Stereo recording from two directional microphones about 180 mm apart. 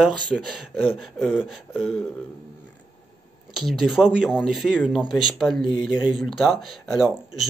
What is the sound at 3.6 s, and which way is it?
Speech, centre (ahead or behind).